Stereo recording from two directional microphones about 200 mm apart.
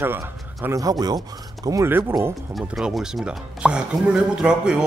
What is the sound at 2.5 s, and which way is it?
Speech, centre (ahead or behind).